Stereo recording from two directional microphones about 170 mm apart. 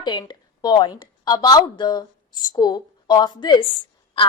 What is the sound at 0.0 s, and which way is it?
A woman's voice, 25° left (ahead or behind).